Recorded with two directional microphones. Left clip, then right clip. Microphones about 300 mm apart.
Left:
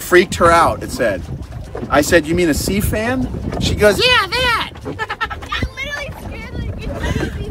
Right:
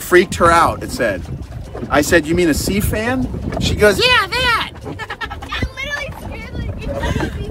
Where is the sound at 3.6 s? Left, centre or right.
Centre.